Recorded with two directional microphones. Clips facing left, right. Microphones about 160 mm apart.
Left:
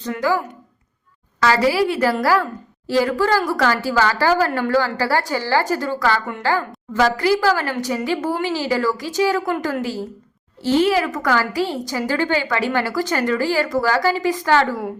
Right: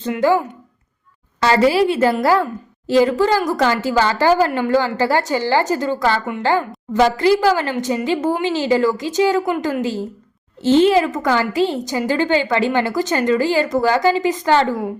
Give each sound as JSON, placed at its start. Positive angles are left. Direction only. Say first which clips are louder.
{"t": 0.0, "sound": "a woman's voice", "louder": "right 4 dB", "side_deg": -25}